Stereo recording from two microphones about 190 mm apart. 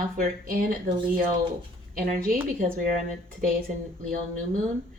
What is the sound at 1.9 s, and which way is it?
Speech, 45° right (ahead or behind).